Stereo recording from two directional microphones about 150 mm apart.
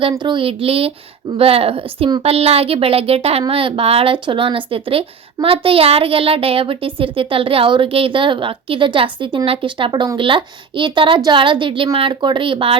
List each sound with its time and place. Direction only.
0.1 s speech: 30° right (ahead or behind)